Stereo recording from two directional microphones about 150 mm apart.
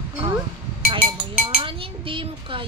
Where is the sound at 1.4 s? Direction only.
35° right (ahead or behind).